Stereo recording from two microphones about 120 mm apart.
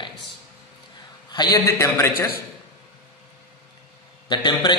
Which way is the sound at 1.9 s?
20° left (ahead or behind).